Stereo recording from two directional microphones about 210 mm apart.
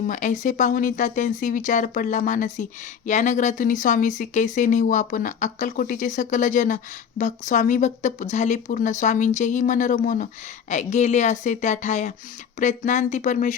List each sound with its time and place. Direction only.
0.1 s speech: 35° left (ahead or behind)